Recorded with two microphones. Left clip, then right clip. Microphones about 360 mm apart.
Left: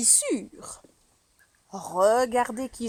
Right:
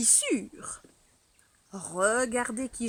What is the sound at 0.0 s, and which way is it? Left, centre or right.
Speech, centre.